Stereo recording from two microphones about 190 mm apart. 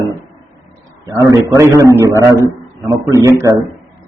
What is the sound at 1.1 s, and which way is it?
A man's voice, 20° right (ahead or behind).